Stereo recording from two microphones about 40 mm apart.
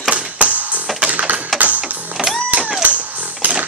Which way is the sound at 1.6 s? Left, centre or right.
Right.